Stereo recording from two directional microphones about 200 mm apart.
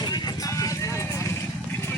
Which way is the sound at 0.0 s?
20° left (ahead or behind).